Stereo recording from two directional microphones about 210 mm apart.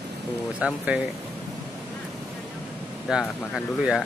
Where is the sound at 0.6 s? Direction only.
5° right (ahead or behind).